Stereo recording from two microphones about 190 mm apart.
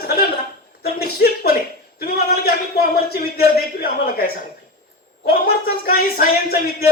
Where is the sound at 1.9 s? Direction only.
55° left (ahead or behind).